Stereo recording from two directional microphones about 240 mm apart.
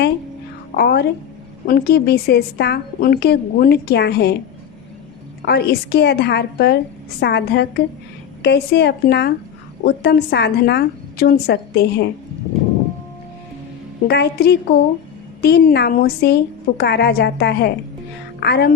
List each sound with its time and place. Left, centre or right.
0.8 s a woman's voice: left
5.5 s a woman's voice: left
14.1 s a woman's voice: left